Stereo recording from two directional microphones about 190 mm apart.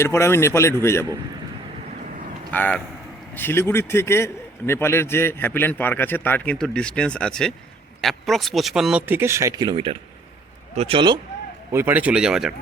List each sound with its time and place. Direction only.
0.0 s a man's voice: 15° left (ahead or behind)
2.5 s a man's voice: 10° left (ahead or behind); by 11.2 s 25° right (ahead or behind)
11.7 s speech: 10° right (ahead or behind)